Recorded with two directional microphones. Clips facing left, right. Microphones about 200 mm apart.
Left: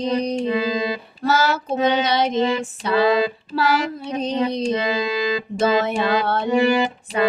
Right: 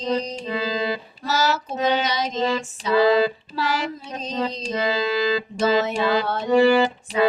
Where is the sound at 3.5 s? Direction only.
65° left (ahead or behind).